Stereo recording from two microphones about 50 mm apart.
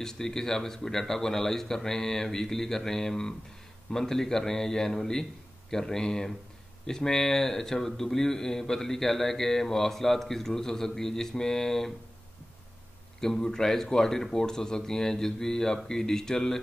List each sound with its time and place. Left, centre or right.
0.0 s speech: centre
13.2 s speech: centre